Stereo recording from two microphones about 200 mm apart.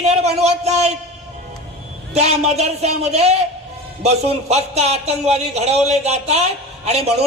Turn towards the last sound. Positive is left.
turn(degrees=-30)  # may be behind; listen again after turning